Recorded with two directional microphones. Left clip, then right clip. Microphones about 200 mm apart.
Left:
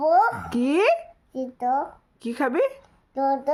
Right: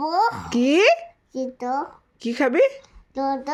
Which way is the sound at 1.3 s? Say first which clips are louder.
Left 1 dB; 10° left (ahead or behind).